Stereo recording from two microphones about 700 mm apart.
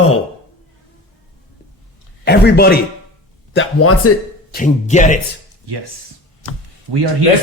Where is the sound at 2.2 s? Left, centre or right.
Centre.